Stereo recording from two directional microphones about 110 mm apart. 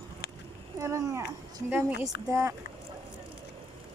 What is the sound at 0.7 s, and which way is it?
Speech, 30° right (ahead or behind).